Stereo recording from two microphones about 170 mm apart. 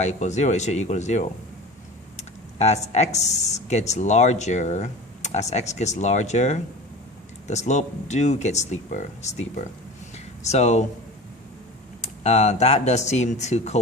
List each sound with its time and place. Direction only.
0.0 s speech: 40° left (ahead or behind)
12.0 s speech: 40° left (ahead or behind)